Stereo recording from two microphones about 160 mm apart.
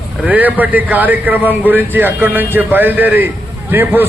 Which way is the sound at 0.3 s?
10° right (ahead or behind).